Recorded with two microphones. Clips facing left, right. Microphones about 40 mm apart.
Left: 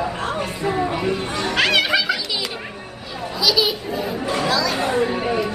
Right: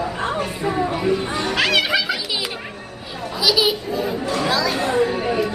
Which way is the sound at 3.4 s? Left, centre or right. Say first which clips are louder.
Right 1 dB; centre.